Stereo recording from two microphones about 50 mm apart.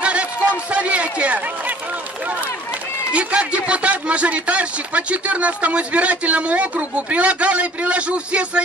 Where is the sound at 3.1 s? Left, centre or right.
Right.